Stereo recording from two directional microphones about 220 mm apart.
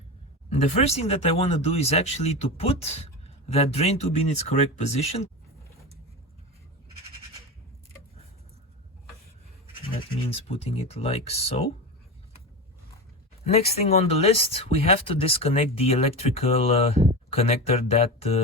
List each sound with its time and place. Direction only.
0.5 s speech: 30° left (ahead or behind)
10.2 s speech: 25° left (ahead or behind)
13.7 s speech: 30° left (ahead or behind)